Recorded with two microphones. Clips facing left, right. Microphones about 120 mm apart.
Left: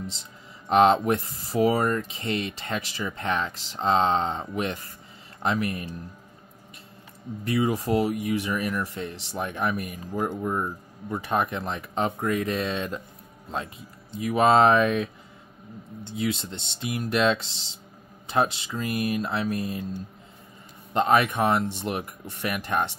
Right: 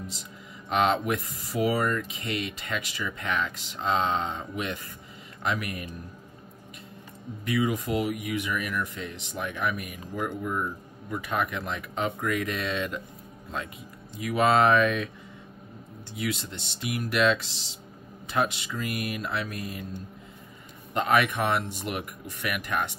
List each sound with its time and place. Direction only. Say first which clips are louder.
0.7 s speech: left 6 dB; 35° left (ahead or behind)
7.4 s speech: left 2 dB; 35° left (ahead or behind)
14.1 s speech: left 3 dB; 25° left (ahead or behind)
20.9 s speech: left 3 dB; 30° left (ahead or behind)